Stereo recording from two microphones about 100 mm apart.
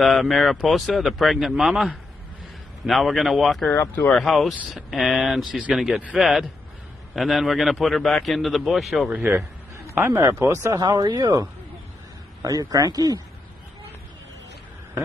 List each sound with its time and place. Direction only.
0.0 s speech: centre (ahead or behind)
3.7 s speech: 20° left (ahead or behind)
4.1 s speech: centre (ahead or behind)
9.1 s speech: 25° right (ahead or behind)
10.8 s a man's voice: 45° right (ahead or behind)